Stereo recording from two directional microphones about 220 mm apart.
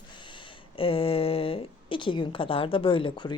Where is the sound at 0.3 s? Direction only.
25° left (ahead or behind).